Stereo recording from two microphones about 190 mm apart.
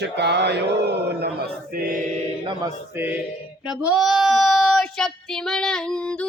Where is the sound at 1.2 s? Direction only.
55° right (ahead or behind).